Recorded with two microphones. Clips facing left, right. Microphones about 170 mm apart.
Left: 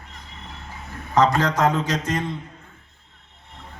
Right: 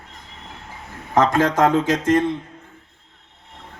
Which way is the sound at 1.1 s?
50° right (ahead or behind).